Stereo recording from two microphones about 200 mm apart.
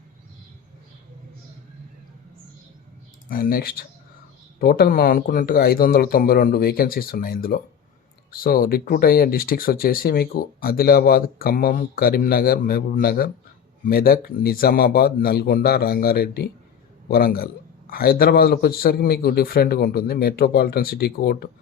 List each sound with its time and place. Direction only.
3.2 s speech: 45° left (ahead or behind)